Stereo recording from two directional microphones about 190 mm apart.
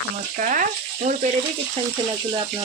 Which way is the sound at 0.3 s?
45° right (ahead or behind).